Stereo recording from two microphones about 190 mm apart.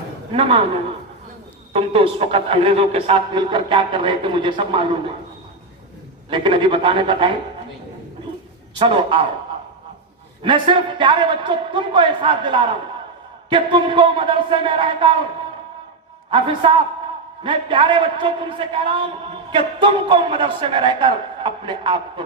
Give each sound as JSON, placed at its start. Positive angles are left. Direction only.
{"t": 0.3, "sound": "a man's voice", "side_deg": -30}
{"t": 6.3, "sound": "a man's voice", "side_deg": -25}
{"t": 8.8, "sound": "a man's voice", "side_deg": -25}
{"t": 10.4, "sound": "a man's voice", "side_deg": -25}
{"t": 16.3, "sound": "a man's voice", "side_deg": -25}